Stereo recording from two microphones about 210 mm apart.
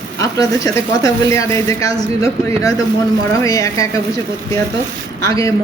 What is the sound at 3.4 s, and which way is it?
Speech, 15° left (ahead or behind).